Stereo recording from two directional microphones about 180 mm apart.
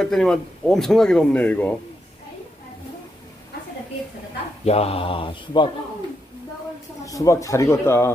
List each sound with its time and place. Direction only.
0.0 s speech: 5° left (ahead or behind)
4.6 s speech: 35° left (ahead or behind)
7.1 s speech: 15° left (ahead or behind)